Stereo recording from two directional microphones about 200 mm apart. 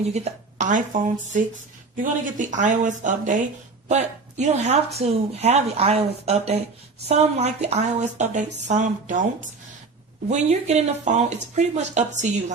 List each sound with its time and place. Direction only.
0.6 s a woman's voice: 40° right (ahead or behind)